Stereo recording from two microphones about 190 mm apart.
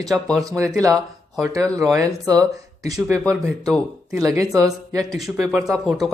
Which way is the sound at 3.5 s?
Centre (ahead or behind).